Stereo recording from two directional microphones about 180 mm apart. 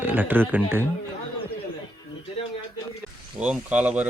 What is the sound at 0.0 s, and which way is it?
Speech, 10° right (ahead or behind).